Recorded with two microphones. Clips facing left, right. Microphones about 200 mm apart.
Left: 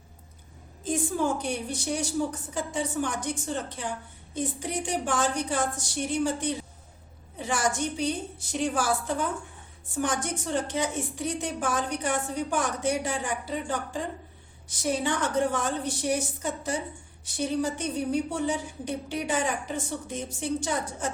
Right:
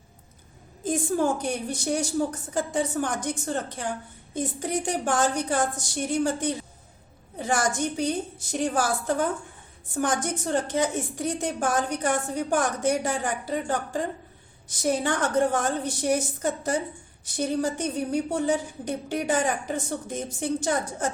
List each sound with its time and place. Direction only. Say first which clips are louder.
0.9 s a woman's voice: right 3 dB; 45° right (ahead or behind)